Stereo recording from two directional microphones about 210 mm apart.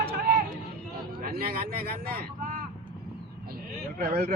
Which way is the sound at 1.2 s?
45° right (ahead or behind).